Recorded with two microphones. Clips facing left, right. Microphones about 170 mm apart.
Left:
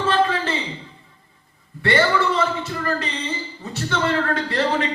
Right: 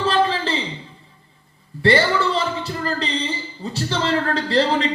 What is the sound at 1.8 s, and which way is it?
A man's voice, 30° right (ahead or behind).